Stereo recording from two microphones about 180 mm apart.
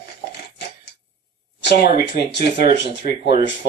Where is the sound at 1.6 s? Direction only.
65° left (ahead or behind).